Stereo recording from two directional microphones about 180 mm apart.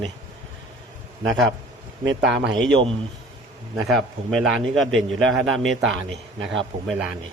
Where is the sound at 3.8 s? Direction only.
Centre (ahead or behind).